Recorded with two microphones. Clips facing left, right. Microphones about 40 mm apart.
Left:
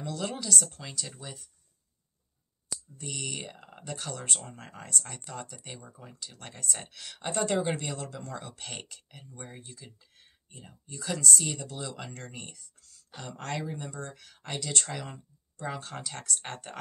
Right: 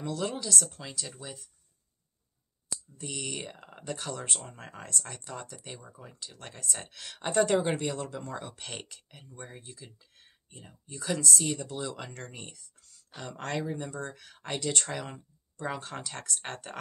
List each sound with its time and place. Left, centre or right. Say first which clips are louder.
0.1 s speech: even; centre
3.0 s speech: even; centre
5.6 s speech: even; centre
6.9 s speech: right 2 dB; centre
11.6 s speech: right 2 dB; centre
13.8 s speech: right 2 dB; right; by 16.8 s centre